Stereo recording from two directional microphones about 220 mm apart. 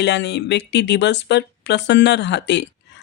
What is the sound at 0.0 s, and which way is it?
Speech, 55° left (ahead or behind).